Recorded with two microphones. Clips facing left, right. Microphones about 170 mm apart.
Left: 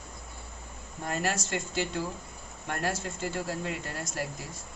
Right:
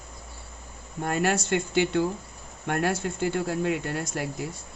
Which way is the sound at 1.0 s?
60° right (ahead or behind).